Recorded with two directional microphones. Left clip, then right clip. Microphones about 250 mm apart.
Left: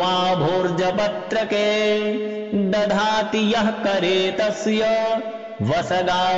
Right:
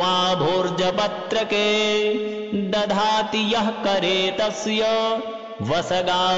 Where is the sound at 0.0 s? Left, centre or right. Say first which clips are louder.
Even; centre.